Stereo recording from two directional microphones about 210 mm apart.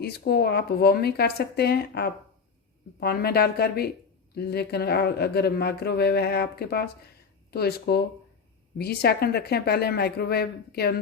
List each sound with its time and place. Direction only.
0.0 s speech: 50° left (ahead or behind)